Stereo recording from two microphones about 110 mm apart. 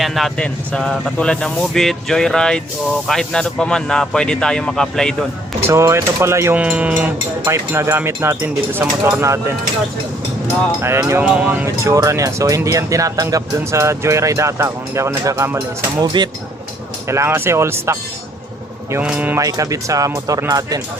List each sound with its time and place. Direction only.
0.0 s speech: centre (ahead or behind)
5.6 s speech: 25° right (ahead or behind)
6.6 s speech: 10° right (ahead or behind)
10.8 s speech: 25° right (ahead or behind)
11.2 s speech: 15° right (ahead or behind)
11.6 s speech: 25° right (ahead or behind)
15.5 s speech: 40° right (ahead or behind)
17.1 s speech: 25° right (ahead or behind)
19.0 s speech: 15° right (ahead or behind)
19.4 s speech: 30° right (ahead or behind)